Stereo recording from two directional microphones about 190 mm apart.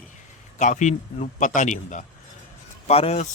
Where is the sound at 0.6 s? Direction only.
40° left (ahead or behind).